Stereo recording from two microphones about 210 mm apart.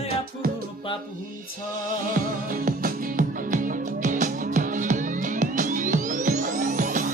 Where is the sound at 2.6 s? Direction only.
40° right (ahead or behind).